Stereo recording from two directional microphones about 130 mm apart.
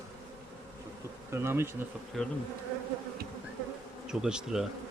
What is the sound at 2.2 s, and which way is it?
Bee, centre (ahead or behind).